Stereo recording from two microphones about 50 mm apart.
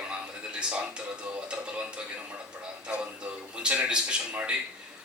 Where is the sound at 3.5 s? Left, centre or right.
Right.